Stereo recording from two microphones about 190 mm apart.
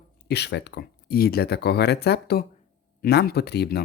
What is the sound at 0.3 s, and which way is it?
Speech, 60° left (ahead or behind).